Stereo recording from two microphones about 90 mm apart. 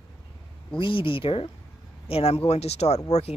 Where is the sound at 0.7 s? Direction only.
75° left (ahead or behind); by 3.0 s 90° left.